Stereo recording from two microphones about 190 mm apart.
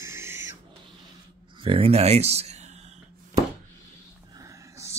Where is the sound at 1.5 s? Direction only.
30° right (ahead or behind).